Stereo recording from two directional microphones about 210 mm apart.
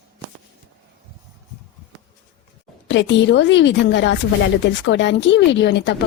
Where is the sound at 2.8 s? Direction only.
60° left (ahead or behind).